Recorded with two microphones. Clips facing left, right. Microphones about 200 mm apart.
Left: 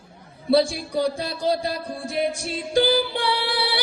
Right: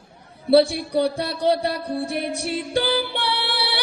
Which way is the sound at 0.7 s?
65° right (ahead or behind).